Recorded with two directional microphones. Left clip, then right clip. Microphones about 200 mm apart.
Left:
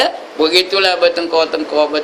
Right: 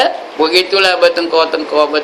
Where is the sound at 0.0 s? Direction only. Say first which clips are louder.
Right 2 dB; 20° left (ahead or behind).